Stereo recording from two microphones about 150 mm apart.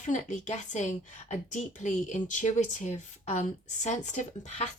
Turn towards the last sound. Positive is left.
turn(degrees=50)  # may be behind; listen again after turning